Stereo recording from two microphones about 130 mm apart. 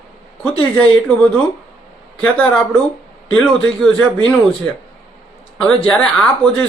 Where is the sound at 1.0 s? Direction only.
10° left (ahead or behind).